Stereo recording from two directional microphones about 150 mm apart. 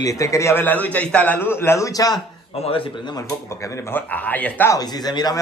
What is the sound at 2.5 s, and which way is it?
Speech, 40° left (ahead or behind).